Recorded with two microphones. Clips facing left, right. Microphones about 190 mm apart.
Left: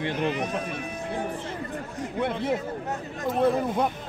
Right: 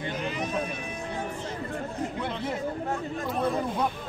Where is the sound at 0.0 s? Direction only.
65° left (ahead or behind).